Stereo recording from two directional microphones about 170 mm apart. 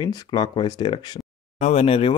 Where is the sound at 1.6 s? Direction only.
40° left (ahead or behind).